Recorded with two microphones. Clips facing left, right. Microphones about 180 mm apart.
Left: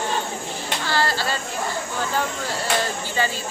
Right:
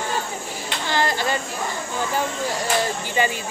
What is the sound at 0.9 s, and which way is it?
Speech, 20° right (ahead or behind).